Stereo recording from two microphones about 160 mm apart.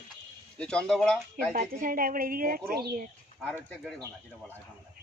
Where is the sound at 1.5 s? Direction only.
60° right (ahead or behind).